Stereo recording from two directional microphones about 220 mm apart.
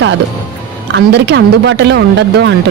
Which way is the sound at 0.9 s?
50° right (ahead or behind).